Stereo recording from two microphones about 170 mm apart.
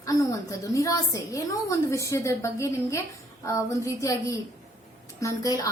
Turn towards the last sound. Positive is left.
turn(degrees=20)  # may be behind; listen again after turning